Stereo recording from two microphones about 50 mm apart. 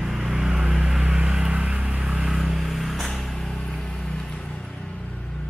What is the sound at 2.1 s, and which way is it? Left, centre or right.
Vehicle, centre.